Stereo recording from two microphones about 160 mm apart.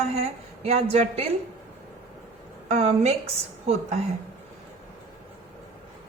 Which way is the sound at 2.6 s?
40° right (ahead or behind).